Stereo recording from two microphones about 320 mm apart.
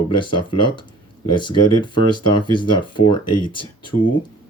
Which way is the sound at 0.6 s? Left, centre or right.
Left.